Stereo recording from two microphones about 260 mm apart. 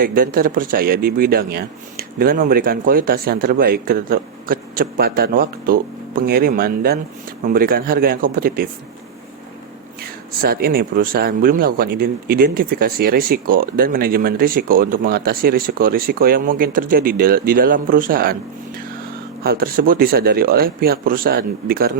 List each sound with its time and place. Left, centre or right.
0.0 s speech: right
10.0 s speech: right